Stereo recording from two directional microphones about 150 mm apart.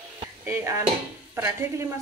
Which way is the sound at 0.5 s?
20° right (ahead or behind).